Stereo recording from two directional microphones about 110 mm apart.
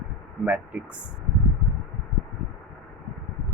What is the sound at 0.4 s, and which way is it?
Speech, 10° right (ahead or behind).